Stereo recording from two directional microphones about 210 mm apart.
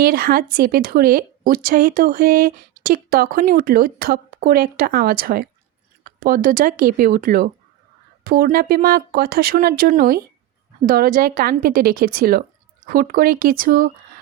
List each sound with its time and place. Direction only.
0.0 s speech: 45° right (ahead or behind)